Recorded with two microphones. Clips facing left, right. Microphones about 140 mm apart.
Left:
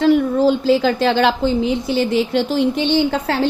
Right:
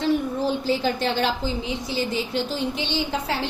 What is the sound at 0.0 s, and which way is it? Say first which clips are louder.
A woman's voice: left 9 dB; 90° left.